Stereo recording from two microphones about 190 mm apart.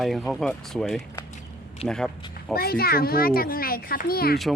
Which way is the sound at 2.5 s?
55° left (ahead or behind).